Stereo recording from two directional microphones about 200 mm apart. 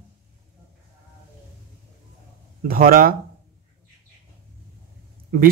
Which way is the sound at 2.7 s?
45° right (ahead or behind).